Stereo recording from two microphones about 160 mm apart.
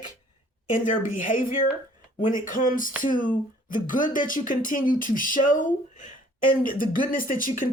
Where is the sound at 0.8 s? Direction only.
55° left (ahead or behind).